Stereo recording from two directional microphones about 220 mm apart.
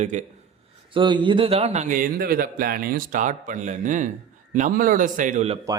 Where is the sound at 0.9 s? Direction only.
20° right (ahead or behind).